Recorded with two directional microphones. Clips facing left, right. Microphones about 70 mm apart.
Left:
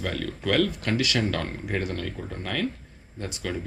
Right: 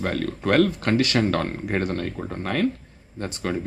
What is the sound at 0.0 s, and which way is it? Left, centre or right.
Speech, right.